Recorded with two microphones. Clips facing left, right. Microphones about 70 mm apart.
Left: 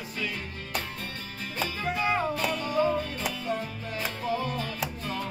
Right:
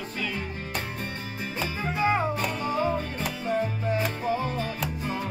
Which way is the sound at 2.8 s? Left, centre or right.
Centre.